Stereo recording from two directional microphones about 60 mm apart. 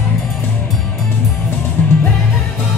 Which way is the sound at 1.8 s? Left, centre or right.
Left.